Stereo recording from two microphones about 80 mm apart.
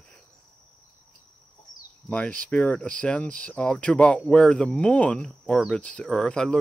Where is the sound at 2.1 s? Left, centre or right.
Centre.